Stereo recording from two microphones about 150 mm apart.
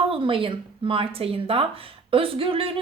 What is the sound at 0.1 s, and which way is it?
A woman's voice, 35° right (ahead or behind).